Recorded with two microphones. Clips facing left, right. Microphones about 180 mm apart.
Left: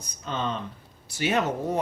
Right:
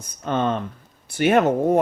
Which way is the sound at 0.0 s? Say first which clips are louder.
Right 8 dB; 50° right (ahead or behind).